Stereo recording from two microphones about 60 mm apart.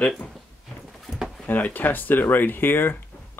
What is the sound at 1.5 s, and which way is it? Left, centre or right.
Speech, left.